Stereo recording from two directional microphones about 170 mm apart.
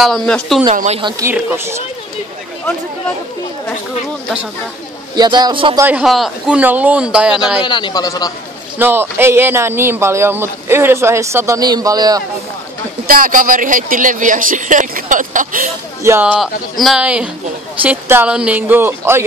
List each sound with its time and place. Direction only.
0.0 s speech: centre (ahead or behind)
0.7 s speech: 40° right (ahead or behind)
1.2 s speech: 15° right (ahead or behind)
5.1 s a man's voice: 25° right (ahead or behind)
5.8 s speech: 10° right (ahead or behind)
7.6 s speech: 25° left (ahead or behind)
8.7 s speech: 10° right (ahead or behind)
13.1 s speech: 55° right (ahead or behind)
16.0 s speech: 15° right (ahead or behind)